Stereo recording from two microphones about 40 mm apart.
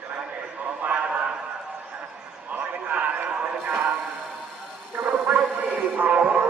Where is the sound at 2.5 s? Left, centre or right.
Right.